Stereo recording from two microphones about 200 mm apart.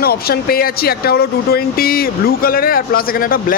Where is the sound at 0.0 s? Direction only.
50° left (ahead or behind).